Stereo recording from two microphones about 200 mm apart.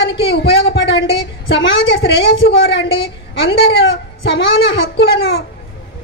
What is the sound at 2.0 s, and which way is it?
Speech, 55° left (ahead or behind).